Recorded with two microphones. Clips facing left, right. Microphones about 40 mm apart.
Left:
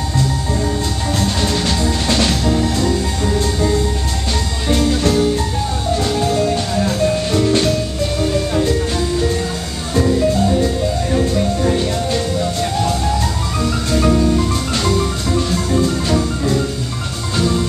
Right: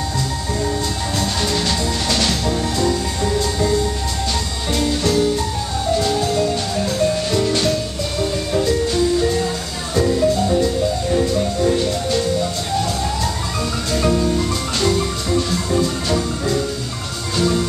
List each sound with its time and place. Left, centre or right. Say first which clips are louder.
1.2 s music: left 2 dB; centre
2.0 s music: left 3 dB; centre
4.6 s music: left 4 dB; left
6.0 s music: left 2 dB; centre
9.9 s music: left 1 dB; centre
13.9 s music: left 3 dB; centre
16.1 s music: left 2 dB; centre